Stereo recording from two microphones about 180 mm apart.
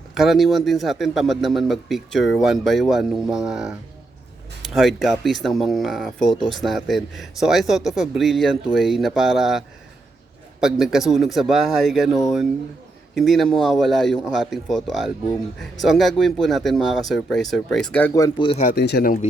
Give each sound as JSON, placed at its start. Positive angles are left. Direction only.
{"t": 0.1, "sound": "a man's voice", "side_deg": 0}
{"t": 18.1, "sound": "speech", "side_deg": 20}
{"t": 18.6, "sound": "speech", "side_deg": 65}